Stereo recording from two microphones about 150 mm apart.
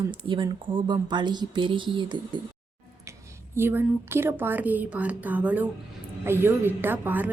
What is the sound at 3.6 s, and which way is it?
A woman's voice, 15° right (ahead or behind).